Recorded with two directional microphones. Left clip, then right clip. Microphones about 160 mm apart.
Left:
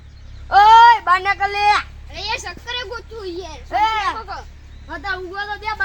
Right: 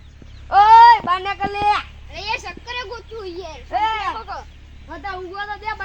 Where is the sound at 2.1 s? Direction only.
Centre (ahead or behind).